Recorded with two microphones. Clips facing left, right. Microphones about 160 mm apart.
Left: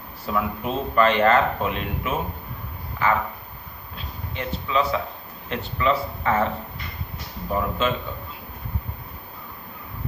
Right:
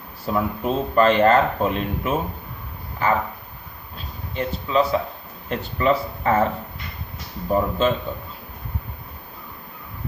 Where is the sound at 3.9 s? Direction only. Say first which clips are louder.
Right 4 dB; 40° right (ahead or behind).